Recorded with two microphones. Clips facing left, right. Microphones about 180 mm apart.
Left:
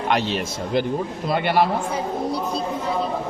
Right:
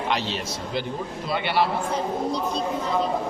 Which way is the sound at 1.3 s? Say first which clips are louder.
Left 4 dB; 50° left (ahead or behind).